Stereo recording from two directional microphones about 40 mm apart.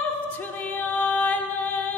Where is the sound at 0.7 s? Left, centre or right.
Left.